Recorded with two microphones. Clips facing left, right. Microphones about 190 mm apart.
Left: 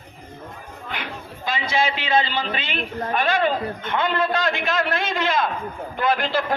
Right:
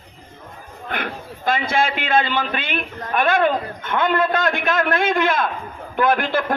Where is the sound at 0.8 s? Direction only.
50° right (ahead or behind).